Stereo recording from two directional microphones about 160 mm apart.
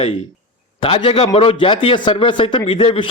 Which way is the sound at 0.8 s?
35° left (ahead or behind).